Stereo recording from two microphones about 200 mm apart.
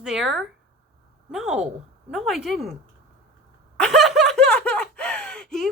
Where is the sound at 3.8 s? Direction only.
Centre (ahead or behind).